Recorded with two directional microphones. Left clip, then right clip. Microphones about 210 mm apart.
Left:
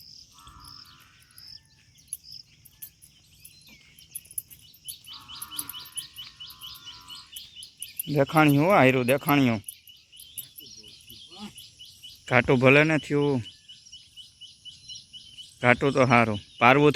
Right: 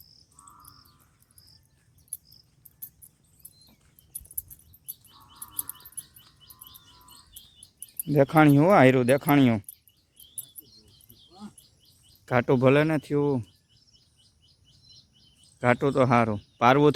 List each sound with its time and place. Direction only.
8.0 s speech: 25° right (ahead or behind)
11.3 s insect: 5° right (ahead or behind)
12.2 s speech: 5° right (ahead or behind)
15.6 s speech: 5° right (ahead or behind)